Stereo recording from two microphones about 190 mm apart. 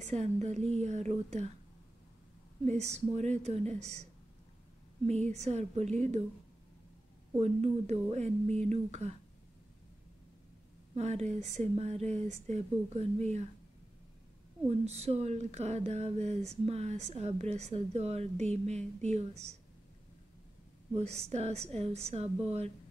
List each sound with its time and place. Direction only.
0.0 s speech: 35° right (ahead or behind)
2.6 s speech: 35° right (ahead or behind)
5.4 s speech: 35° right (ahead or behind)
7.3 s speech: 35° right (ahead or behind)
11.0 s speech: 35° right (ahead or behind)
14.7 s speech: 35° right (ahead or behind)
20.9 s speech: 35° right (ahead or behind)